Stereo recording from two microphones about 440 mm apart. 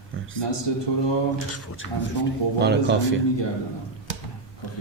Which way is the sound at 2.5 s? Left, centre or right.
Right.